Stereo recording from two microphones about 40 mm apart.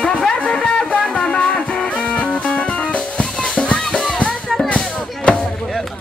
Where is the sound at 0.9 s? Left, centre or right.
Left.